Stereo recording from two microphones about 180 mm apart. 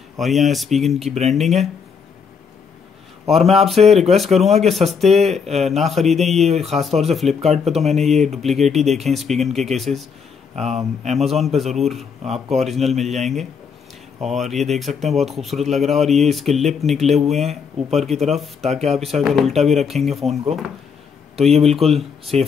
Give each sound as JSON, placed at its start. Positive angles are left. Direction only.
{"t": 0.2, "sound": "speech", "side_deg": 0}
{"t": 3.3, "sound": "speech", "side_deg": 0}
{"t": 10.5, "sound": "speech", "side_deg": -35}
{"t": 11.1, "sound": "speech", "side_deg": 0}
{"t": 21.4, "sound": "speech", "side_deg": 0}